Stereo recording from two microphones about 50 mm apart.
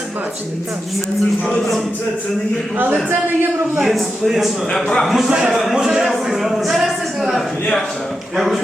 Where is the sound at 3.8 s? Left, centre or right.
Centre.